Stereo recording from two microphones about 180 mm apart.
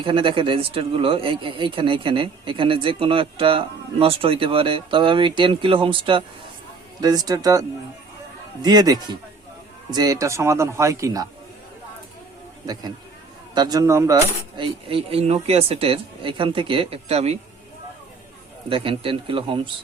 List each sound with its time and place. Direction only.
0.0 s cutlery: 30° right (ahead or behind)
8.6 s cutlery: 20° right (ahead or behind)
9.9 s speech: 20° right (ahead or behind)
13.5 s cutlery: 20° right (ahead or behind)
18.7 s cutlery: 30° right (ahead or behind)